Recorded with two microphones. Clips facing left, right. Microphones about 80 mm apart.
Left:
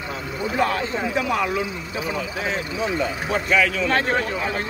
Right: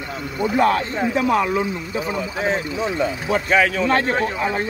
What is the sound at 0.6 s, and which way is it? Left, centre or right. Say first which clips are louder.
Speech: right 4 dB; right.